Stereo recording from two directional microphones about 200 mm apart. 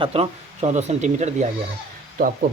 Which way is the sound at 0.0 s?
30° right (ahead or behind).